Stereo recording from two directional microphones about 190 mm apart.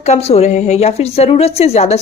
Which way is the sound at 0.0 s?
35° left (ahead or behind).